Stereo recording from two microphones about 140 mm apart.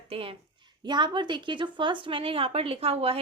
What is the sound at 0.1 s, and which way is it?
A woman's voice, 40° right (ahead or behind).